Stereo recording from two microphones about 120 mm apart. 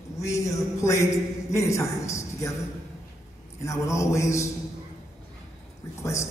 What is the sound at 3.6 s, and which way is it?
Speech, 25° left (ahead or behind).